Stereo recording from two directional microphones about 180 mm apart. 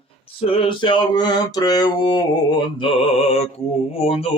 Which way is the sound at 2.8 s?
30° left (ahead or behind).